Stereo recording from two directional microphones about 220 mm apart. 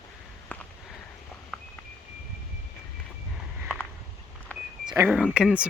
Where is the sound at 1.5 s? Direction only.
Centre (ahead or behind).